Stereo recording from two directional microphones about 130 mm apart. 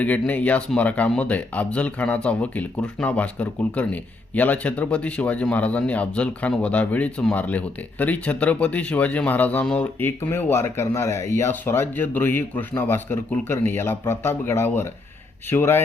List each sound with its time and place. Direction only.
0.0 s speech: 10° left (ahead or behind)